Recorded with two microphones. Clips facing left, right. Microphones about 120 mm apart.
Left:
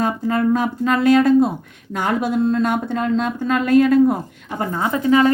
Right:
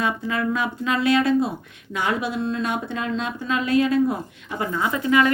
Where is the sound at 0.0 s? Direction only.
45° left (ahead or behind).